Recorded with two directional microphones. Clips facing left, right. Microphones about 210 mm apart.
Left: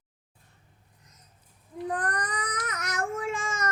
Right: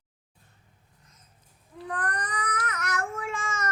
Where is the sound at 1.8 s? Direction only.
20° left (ahead or behind).